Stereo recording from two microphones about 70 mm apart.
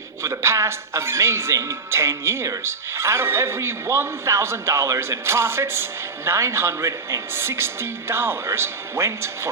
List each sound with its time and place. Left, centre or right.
0.2 s speech: right